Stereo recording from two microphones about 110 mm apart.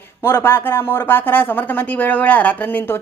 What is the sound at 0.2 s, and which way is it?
A woman's voice, 20° left (ahead or behind).